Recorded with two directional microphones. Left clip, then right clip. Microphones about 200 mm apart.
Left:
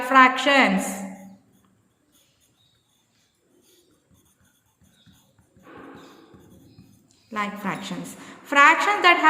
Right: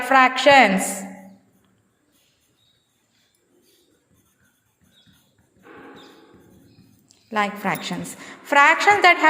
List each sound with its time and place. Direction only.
0.1 s a woman's voice: 25° right (ahead or behind)
7.3 s a woman's voice: 25° right (ahead or behind)